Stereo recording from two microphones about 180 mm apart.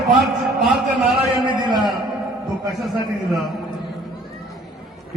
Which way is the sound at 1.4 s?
25° right (ahead or behind).